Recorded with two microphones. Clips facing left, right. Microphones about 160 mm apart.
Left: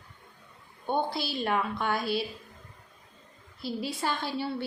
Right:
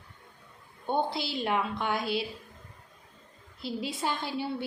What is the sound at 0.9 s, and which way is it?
A woman's voice, 20° right (ahead or behind).